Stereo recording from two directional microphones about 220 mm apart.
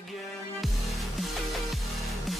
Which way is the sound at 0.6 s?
Centre (ahead or behind).